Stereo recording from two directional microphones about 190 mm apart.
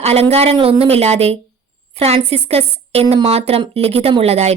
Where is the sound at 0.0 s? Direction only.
35° right (ahead or behind).